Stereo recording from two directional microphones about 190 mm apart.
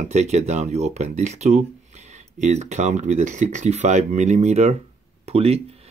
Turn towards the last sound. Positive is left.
turn(degrees=-30)  # may be behind; listen again after turning